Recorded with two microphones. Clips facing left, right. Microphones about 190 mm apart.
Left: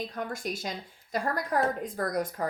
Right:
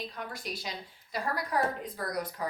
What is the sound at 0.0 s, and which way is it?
A woman's voice, 50° left (ahead or behind).